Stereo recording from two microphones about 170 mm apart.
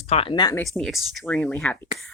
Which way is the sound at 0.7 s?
Centre (ahead or behind).